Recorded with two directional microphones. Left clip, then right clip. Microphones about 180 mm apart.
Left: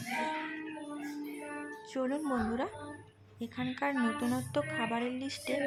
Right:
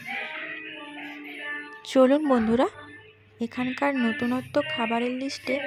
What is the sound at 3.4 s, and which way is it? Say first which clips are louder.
Music: right 9 dB; 40° right (ahead or behind).